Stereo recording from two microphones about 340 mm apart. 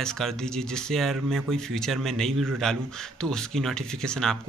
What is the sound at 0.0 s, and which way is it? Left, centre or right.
A man's voice, centre.